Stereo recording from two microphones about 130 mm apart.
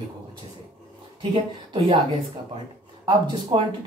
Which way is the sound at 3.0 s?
35° right (ahead or behind).